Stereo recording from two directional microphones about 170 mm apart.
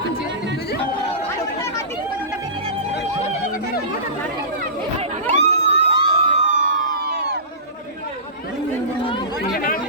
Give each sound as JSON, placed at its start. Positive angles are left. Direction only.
{"t": 5.3, "sound": "crowd", "side_deg": -40}
{"t": 6.6, "sound": "emergency vehicle", "side_deg": -50}